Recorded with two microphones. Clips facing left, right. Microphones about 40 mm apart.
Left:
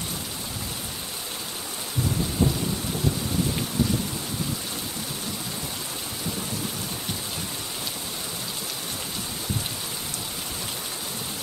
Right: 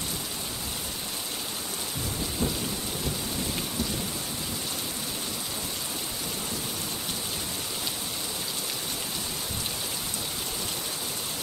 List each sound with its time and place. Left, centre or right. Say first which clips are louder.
2.4 s thunder: left 6 dB; left